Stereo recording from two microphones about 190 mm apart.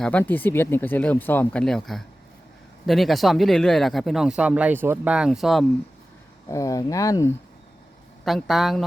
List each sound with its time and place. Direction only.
0.0 s speech: 5° left (ahead or behind)
6.5 s speech: 15° left (ahead or behind)
8.2 s speech: centre (ahead or behind)